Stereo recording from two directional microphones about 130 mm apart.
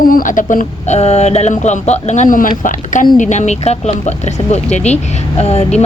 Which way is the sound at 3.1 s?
70° left (ahead or behind).